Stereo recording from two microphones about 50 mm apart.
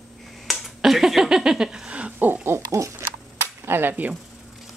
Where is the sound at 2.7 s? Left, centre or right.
Right.